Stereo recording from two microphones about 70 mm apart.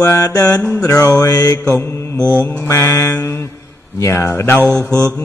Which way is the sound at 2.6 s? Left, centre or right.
Left.